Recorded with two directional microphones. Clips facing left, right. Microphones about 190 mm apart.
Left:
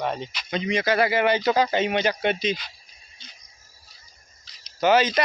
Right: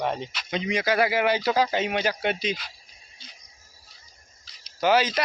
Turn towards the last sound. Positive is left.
turn(degrees=-5)  # may be behind; listen again after turning